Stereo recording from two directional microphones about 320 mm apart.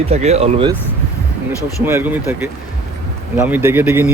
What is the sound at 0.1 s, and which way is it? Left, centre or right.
Speech, centre.